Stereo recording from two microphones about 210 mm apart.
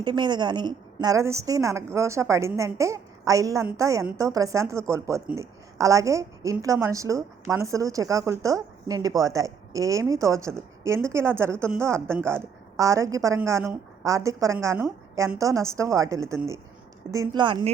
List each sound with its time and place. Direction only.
0.0 s a woman's voice: 20° right (ahead or behind)